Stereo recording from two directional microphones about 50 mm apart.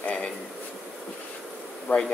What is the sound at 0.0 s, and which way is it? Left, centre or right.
Bee, left.